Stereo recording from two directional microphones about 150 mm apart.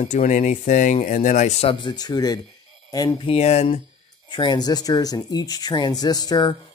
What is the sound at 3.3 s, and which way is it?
Speech, 45° left (ahead or behind).